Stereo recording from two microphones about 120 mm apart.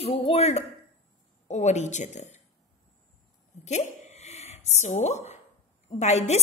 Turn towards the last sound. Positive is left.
turn(degrees=65)  # may be behind; listen again after turning